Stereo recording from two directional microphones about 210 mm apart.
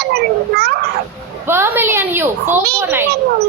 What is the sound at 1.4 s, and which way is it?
A woman's voice, 10° right (ahead or behind).